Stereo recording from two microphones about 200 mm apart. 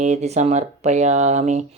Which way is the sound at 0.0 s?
35° right (ahead or behind).